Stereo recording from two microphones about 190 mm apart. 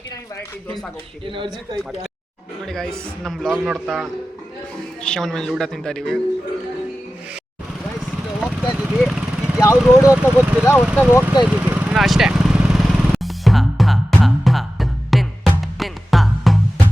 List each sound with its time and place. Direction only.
1.2 s speech: 25° right (ahead or behind)
1.7 s speech: centre (ahead or behind)
8.4 s a sound: centre (ahead or behind)
9.6 s speech: 15° left (ahead or behind)
10.1 s speech: 10° right (ahead or behind)
11.4 s vehicle: 5° right (ahead or behind)